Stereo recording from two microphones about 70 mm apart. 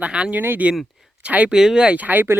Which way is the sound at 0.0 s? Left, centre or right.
Centre.